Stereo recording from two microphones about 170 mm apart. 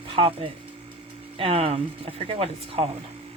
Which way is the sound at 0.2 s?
30° right (ahead or behind).